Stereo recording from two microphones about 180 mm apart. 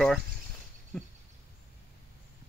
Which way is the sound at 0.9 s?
Centre (ahead or behind).